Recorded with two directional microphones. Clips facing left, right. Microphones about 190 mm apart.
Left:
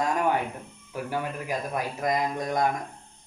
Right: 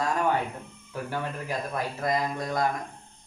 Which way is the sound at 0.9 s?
10° left (ahead or behind).